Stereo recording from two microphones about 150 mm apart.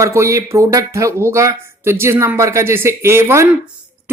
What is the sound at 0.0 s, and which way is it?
Speech, 20° right (ahead or behind).